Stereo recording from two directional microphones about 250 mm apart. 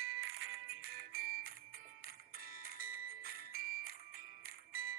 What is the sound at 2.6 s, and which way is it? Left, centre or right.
Music, right.